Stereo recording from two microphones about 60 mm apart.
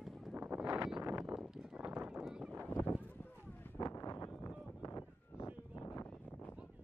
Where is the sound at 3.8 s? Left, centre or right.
Left.